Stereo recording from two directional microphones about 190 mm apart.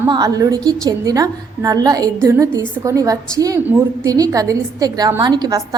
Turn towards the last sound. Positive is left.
turn(degrees=-20)  # may be behind; listen again after turning